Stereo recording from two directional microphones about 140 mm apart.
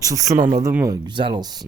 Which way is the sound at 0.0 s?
25° right (ahead or behind).